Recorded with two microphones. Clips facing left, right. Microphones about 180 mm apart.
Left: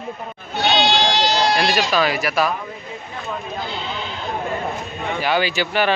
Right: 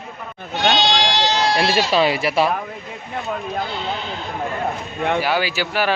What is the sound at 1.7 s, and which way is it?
Speech, 25° right (ahead or behind).